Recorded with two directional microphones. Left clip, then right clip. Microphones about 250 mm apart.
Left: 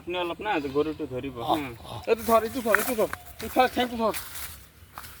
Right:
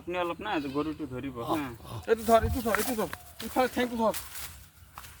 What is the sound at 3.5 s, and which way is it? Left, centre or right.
Speech, right.